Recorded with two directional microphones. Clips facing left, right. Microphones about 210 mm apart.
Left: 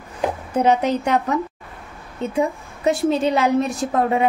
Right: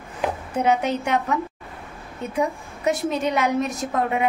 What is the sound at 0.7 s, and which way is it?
A woman's voice, 35° left (ahead or behind).